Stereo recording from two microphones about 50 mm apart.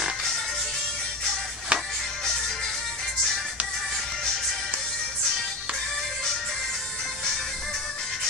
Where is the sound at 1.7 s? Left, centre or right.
Right.